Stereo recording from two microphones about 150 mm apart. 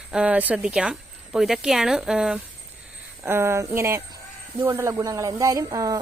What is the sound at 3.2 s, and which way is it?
Speech, 15° right (ahead or behind).